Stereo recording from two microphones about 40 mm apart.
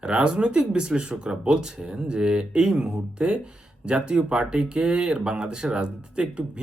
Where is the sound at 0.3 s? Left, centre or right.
Right.